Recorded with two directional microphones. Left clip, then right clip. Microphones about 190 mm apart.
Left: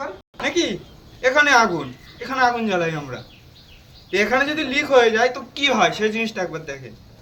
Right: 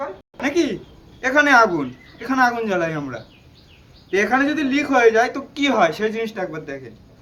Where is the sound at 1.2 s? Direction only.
45° right (ahead or behind); by 6.7 s 30° right (ahead or behind).